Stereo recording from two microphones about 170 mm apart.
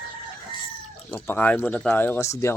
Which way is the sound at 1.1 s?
10° left (ahead or behind).